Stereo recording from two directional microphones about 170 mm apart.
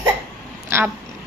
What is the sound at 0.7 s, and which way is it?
Speech, 15° right (ahead or behind).